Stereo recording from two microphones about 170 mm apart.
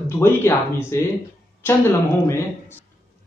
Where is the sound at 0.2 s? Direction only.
15° left (ahead or behind).